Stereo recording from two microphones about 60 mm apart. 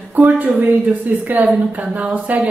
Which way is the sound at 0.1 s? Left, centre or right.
Right.